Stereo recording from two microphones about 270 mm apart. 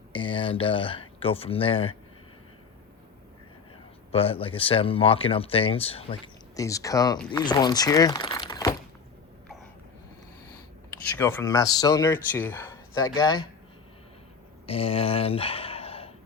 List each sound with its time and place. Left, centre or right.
0.1 s speech: centre
4.1 s speech: left
11.2 s speech: centre
14.7 s speech: left